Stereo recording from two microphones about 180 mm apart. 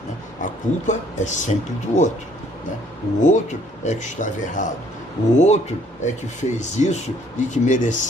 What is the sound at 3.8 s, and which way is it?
Speech, 40° left (ahead or behind).